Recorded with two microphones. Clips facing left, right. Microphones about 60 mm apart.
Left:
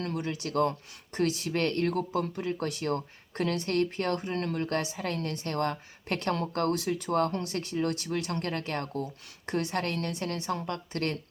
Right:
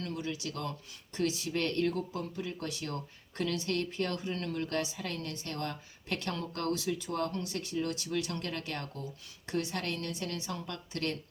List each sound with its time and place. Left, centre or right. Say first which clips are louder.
0.0 s speech: left 4 dB; left